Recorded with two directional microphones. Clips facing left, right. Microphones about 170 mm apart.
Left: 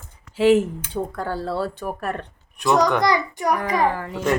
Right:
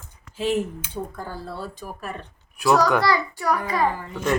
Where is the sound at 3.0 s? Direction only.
20° left (ahead or behind).